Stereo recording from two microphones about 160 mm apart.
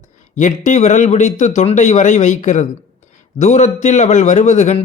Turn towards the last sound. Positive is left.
turn(degrees=45)  # may be behind; listen again after turning